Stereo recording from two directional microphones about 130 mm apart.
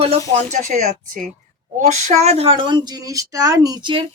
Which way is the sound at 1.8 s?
60° right (ahead or behind).